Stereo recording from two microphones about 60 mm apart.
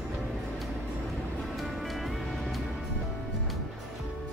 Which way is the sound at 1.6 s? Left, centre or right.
Centre.